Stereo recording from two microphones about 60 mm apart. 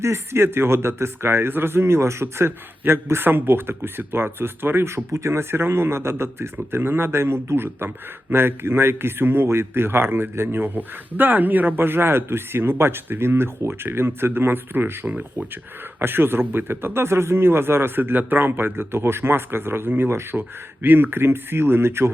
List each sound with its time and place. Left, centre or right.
0.0 s a man's voice: right